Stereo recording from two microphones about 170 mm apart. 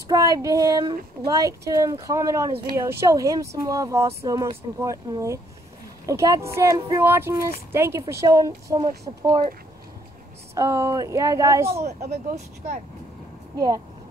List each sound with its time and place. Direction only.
0.1 s speech: 20° right (ahead or behind)
10.5 s speech: 20° right (ahead or behind)
11.7 s speech: 40° right (ahead or behind)